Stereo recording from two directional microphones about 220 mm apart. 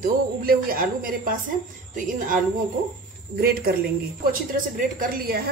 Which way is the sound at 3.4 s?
45° right (ahead or behind).